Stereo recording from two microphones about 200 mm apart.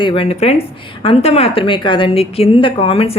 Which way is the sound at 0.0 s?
25° left (ahead or behind).